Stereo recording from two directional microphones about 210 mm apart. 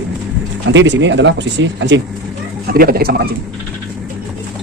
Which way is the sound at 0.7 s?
60° right (ahead or behind).